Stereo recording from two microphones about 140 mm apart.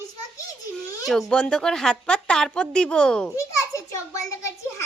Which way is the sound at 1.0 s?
Centre (ahead or behind).